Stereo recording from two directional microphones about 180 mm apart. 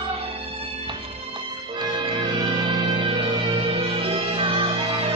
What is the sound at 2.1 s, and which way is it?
Music, 25° right (ahead or behind).